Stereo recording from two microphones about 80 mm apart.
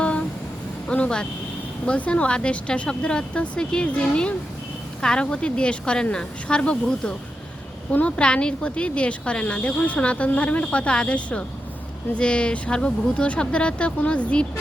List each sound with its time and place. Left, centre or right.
0.9 s speech: centre